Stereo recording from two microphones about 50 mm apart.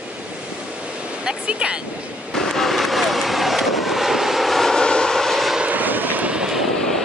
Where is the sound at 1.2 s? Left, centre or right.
Right.